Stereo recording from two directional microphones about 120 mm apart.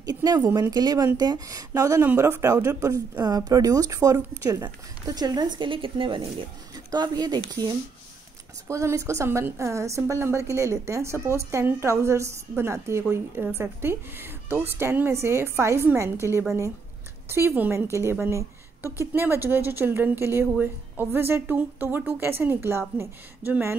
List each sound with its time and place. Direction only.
0.0 s a woman's voice: 35° right (ahead or behind)
8.6 s a woman's voice: 25° right (ahead or behind)
18.2 s a sound: 20° right (ahead or behind)
19.1 s a woman's voice: 20° right (ahead or behind)